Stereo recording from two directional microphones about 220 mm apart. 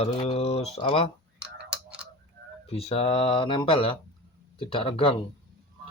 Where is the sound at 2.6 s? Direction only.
25° left (ahead or behind).